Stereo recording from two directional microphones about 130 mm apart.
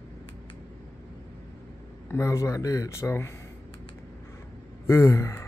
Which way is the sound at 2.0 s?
20° left (ahead or behind).